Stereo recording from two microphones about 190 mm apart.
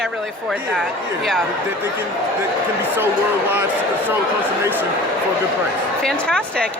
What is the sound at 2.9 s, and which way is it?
Speech, 10° right (ahead or behind).